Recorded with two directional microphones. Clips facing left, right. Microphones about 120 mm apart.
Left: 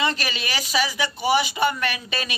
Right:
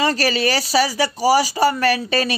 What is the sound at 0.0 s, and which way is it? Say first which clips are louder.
Speech: right 7 dB; 40° right (ahead or behind).